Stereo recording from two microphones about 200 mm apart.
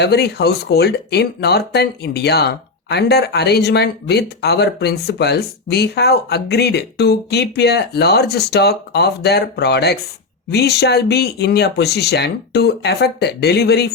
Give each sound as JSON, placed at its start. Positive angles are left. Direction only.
{"t": 0.0, "sound": "speech", "side_deg": 55}